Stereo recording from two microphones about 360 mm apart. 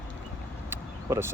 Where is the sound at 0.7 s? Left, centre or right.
Centre.